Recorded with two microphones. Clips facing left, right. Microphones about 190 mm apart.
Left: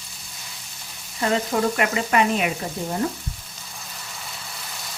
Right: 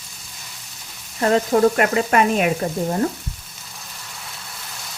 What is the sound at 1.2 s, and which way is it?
Sizzle, 45° right (ahead or behind).